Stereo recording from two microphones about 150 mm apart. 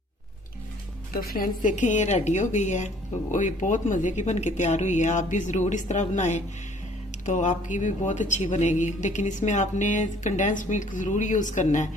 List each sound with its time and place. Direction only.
1.1 s speech: 70° left (ahead or behind); by 11.9 s 55° left (ahead or behind)